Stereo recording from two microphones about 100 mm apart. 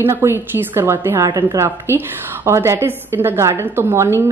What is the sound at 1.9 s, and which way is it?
Speech, 25° left (ahead or behind).